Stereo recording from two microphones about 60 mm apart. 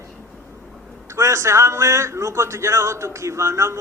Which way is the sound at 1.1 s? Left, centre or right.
Right.